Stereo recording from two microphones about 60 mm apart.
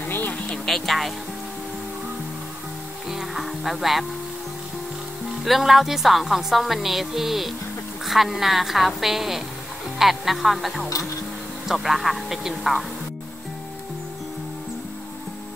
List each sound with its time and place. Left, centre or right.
0.0 s music: left
0.3 s music: left
0.7 s speech: centre
3.1 s music: centre
5.4 s a woman's voice: centre